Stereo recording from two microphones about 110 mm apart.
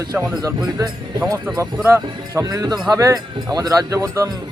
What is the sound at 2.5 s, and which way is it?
Speech, 35° right (ahead or behind).